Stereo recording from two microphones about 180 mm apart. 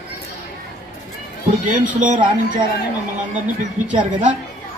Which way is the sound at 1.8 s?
45° right (ahead or behind).